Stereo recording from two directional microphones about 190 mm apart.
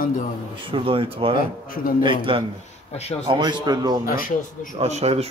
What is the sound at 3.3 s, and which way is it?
Speech, 25° right (ahead or behind).